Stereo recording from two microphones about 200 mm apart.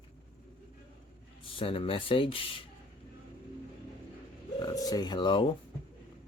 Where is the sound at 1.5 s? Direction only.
25° left (ahead or behind).